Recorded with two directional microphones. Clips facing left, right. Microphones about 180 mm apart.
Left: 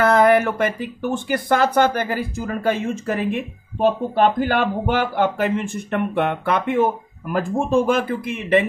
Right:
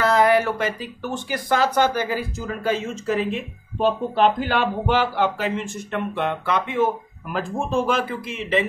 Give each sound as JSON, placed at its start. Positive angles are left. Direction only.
{"t": 0.0, "sound": "speech", "side_deg": 55}